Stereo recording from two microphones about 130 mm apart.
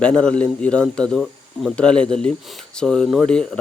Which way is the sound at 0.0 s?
5° left (ahead or behind).